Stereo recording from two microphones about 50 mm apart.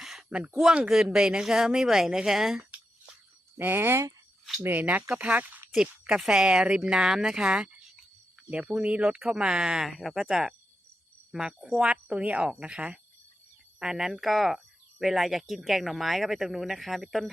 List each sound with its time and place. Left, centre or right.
0.0 s a sound: centre
0.3 s a woman's voice: right
0.9 s speech: centre
3.6 s speech: right
4.8 s a woman's voice: right
6.1 s a woman's voice: centre
13.7 s speech: centre